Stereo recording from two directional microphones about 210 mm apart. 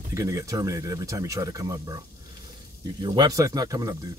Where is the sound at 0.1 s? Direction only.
15° right (ahead or behind).